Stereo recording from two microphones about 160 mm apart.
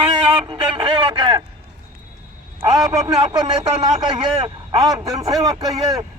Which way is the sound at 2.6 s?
25° right (ahead or behind).